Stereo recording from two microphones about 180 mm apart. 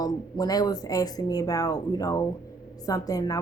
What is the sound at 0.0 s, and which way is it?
A woman's voice, 20° left (ahead or behind).